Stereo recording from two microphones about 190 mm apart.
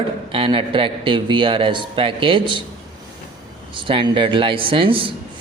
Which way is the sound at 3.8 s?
25° right (ahead or behind).